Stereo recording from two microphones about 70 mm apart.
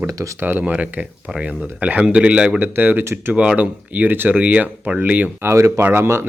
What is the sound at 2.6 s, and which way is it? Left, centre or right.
Speech, right.